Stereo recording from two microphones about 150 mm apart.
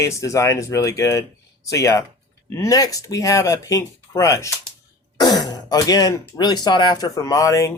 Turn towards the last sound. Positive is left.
turn(degrees=20)  # may be behind; listen again after turning